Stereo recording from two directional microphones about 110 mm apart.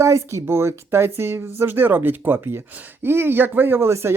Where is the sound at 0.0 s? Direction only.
25° right (ahead or behind).